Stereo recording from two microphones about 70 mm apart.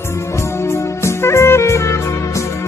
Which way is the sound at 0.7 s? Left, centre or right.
Left.